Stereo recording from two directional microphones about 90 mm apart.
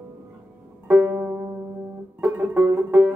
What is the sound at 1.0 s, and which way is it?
Music, 20° right (ahead or behind).